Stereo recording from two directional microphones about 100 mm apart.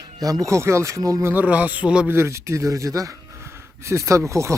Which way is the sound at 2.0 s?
25° right (ahead or behind).